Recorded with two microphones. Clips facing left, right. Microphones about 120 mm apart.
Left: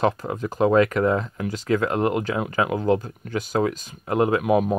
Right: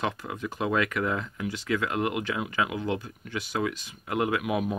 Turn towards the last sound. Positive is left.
turn(degrees=40)  # may be behind; listen again after turning